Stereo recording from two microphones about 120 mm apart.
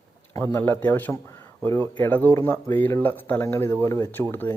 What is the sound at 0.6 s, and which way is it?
Speech, 15° left (ahead or behind).